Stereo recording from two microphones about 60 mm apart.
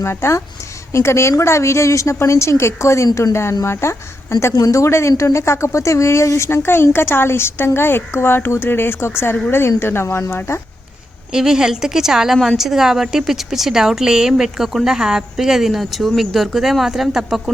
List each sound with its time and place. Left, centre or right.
0.0 s speech: left
4.5 s speech: left
11.3 s a woman's voice: centre